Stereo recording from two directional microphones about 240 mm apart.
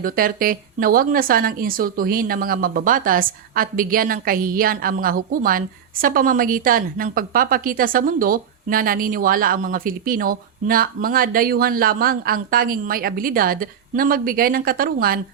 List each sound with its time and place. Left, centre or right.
0.0 s speech: right